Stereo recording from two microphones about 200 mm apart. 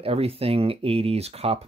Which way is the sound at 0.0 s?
30° right (ahead or behind).